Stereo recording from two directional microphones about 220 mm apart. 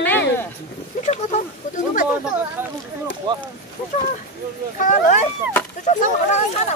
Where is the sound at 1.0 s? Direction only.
30° left (ahead or behind).